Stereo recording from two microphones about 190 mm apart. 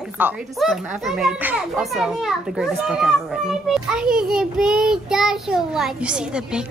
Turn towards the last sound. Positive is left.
turn(degrees=-5)  # may be behind; listen again after turning